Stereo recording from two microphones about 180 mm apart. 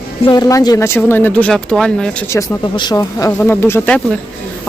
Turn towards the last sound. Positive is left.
turn(degrees=5)  # may be behind; listen again after turning